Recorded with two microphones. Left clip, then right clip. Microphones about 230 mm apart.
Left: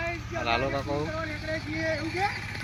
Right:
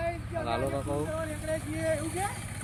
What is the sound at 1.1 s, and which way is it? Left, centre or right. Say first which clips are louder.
Speech: left 1 dB; right.